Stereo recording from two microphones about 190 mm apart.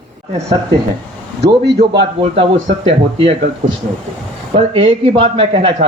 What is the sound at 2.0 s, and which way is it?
A man's voice, 30° right (ahead or behind).